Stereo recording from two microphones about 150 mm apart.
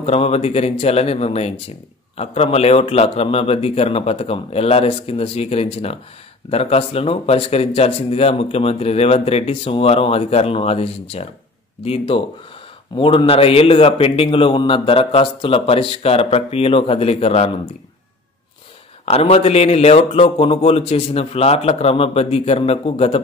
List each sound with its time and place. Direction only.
0.0 s a man's voice: 40° left (ahead or behind)
19.0 s speech: 40° left (ahead or behind)